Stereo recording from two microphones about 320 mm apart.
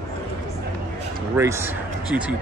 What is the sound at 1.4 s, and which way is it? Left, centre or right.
Speech, centre.